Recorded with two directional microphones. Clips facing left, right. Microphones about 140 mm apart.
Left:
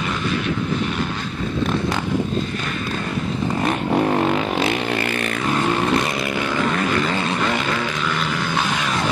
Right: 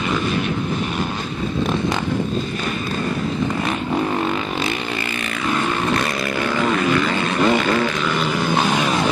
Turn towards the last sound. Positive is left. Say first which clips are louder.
# right 5 dB
turn(degrees=-10)  # may be behind; listen again after turning